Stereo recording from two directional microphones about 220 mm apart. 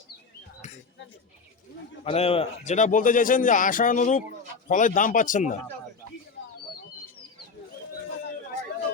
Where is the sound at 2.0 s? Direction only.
25° left (ahead or behind).